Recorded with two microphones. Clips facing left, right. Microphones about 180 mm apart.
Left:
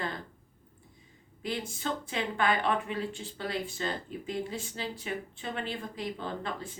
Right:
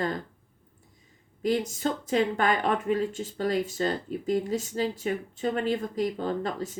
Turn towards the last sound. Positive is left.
turn(degrees=-40)  # may be behind; listen again after turning